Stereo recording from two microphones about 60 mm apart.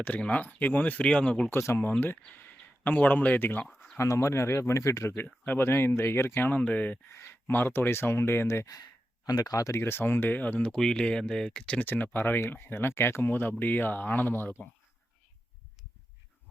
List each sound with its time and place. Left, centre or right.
0.0 s speech: left
1.5 s speech: left
1.9 s speech: left
3.7 s a sound: centre
3.9 s speech: left
5.1 s speech: left
7.1 s speech: left
9.2 s speech: left
9.8 s speech: left
10.6 s speech: centre
11.8 s speech: left